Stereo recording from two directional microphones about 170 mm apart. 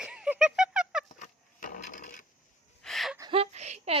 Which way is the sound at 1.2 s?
55° left (ahead or behind).